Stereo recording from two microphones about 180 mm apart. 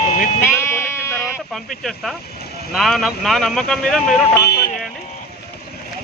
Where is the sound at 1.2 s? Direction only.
Centre (ahead or behind).